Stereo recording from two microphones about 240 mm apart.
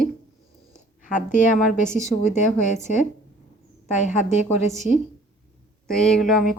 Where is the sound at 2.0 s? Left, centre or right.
Left.